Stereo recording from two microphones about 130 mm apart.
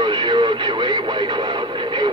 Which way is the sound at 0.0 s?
35° right (ahead or behind).